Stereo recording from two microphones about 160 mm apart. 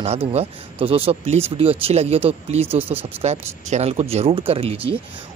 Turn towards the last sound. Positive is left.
turn(degrees=-35)  # may be behind; listen again after turning